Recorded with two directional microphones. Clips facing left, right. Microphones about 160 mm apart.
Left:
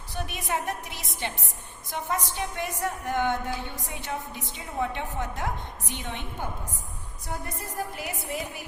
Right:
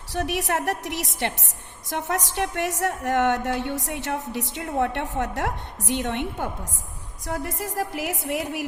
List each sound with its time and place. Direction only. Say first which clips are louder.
0.1 s a woman's voice: right 6 dB; 80° right
7.3 s a woman's voice: right 6 dB; 90° right